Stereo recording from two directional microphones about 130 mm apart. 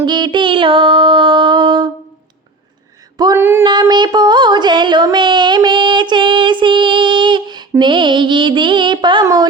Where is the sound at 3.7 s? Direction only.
35° right (ahead or behind).